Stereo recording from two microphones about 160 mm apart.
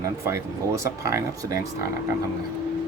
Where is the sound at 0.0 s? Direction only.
20° right (ahead or behind).